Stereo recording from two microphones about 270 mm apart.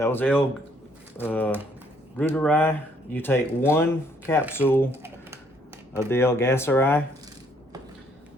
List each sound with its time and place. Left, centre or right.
0.0 s speech: centre
4.9 s typing: centre
6.0 s speech: centre